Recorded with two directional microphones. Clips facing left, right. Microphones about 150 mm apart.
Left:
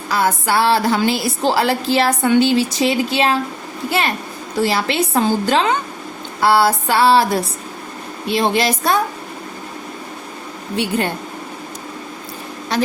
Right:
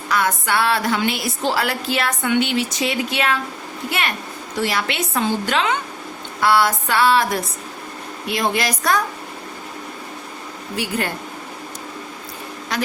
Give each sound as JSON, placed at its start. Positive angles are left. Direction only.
{"t": 0.1, "sound": "a woman's voice", "side_deg": 30}
{"t": 10.8, "sound": "a woman's voice", "side_deg": 25}
{"t": 12.7, "sound": "a woman's voice", "side_deg": 30}